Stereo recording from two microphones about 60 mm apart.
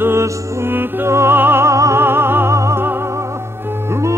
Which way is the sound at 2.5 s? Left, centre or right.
Right.